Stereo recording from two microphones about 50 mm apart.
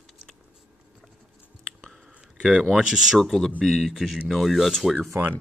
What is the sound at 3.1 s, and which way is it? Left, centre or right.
Speech, centre.